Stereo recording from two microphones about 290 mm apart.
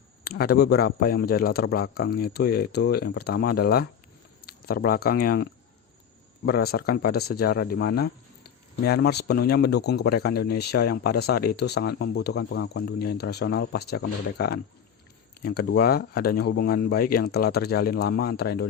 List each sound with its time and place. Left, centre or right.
0.3 s speech: left